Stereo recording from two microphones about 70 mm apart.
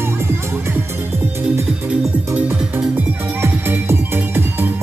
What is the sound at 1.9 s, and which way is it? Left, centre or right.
Music, right.